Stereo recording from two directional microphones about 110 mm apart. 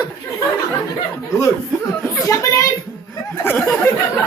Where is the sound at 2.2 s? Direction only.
30° left (ahead or behind).